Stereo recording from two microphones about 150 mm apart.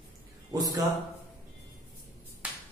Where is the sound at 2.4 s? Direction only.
5° right (ahead or behind).